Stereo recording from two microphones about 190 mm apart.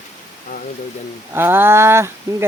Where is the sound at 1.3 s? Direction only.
10° right (ahead or behind).